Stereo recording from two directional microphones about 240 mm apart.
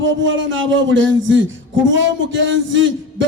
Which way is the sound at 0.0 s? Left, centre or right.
Right.